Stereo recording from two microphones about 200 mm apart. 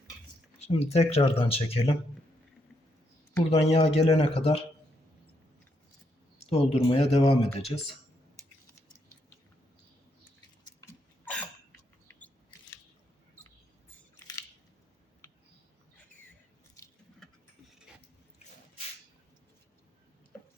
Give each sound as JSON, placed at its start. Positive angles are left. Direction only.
{"t": 0.6, "sound": "speech", "side_deg": 30}
{"t": 3.5, "sound": "speech", "side_deg": 30}
{"t": 6.4, "sound": "speech", "side_deg": 30}
{"t": 10.6, "sound": "a sound", "side_deg": 20}